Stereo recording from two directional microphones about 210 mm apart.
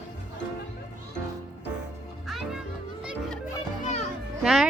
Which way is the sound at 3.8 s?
35° left (ahead or behind).